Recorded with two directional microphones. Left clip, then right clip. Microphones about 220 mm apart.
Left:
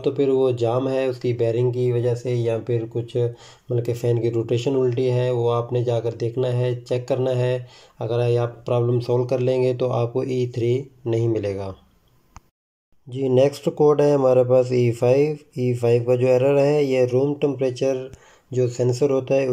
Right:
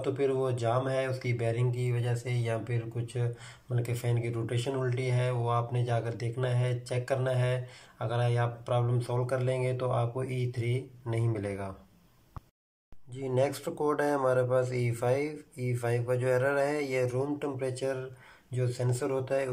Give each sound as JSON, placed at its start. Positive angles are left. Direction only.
{"t": 0.0, "sound": "speech", "side_deg": 20}
{"t": 13.1, "sound": "speech", "side_deg": 15}